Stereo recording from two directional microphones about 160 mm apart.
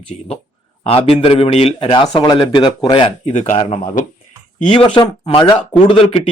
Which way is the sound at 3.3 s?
45° left (ahead or behind).